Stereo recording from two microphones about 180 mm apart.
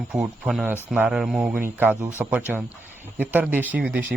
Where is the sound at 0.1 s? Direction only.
Centre (ahead or behind).